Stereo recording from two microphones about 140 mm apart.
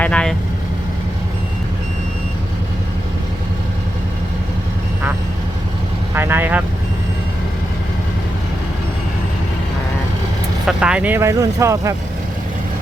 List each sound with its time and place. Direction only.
0.0 s vehicle: 5° left (ahead or behind)
6.1 s vehicle: 15° right (ahead or behind)
10.7 s speech: 5° right (ahead or behind); by 11.9 s 20° right (ahead or behind)